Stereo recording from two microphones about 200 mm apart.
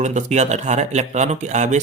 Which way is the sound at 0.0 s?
35° right (ahead or behind).